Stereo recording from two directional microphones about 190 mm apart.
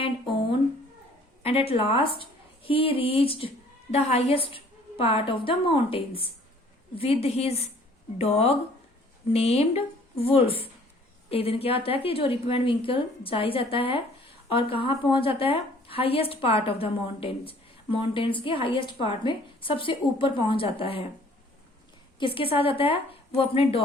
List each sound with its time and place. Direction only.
1.4 s a woman's voice: 30° left (ahead or behind)
22.2 s speech: 30° left (ahead or behind)